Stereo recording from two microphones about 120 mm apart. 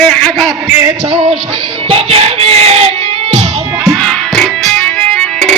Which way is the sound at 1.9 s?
55° right (ahead or behind).